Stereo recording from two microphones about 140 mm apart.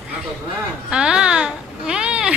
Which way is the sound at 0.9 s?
5° right (ahead or behind).